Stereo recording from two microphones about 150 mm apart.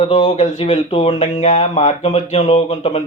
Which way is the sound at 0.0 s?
40° left (ahead or behind).